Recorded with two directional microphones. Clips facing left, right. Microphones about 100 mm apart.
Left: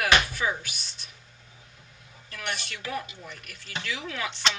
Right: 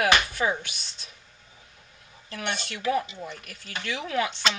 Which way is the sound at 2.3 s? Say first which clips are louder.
Right 3 dB; 30° right (ahead or behind).